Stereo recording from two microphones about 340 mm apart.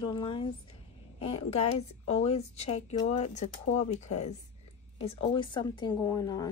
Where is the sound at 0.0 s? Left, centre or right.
Centre.